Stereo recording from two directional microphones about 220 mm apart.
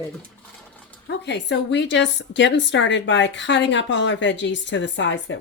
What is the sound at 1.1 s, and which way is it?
A woman's voice, 50° left (ahead or behind).